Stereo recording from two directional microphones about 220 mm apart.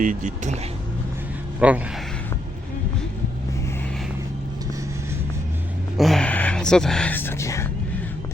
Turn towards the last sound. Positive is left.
turn(degrees=10)  # may be behind; listen again after turning